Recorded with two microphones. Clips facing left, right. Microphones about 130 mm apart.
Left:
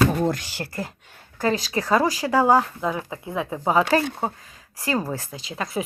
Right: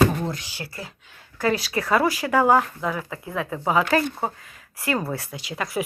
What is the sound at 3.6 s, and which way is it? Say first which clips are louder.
Speech: left 1 dB; 30° left (ahead or behind).